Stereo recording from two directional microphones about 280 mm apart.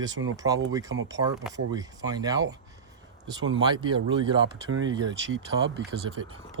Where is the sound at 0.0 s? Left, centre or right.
Right.